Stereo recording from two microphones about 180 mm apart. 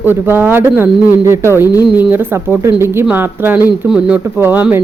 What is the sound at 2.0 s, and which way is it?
Speech, 10° right (ahead or behind).